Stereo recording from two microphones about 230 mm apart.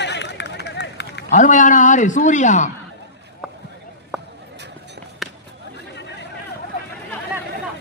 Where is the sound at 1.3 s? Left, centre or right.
Left.